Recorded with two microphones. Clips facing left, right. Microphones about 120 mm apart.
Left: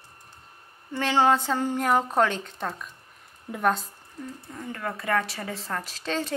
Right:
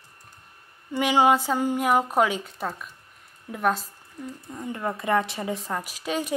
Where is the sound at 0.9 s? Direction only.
15° right (ahead or behind).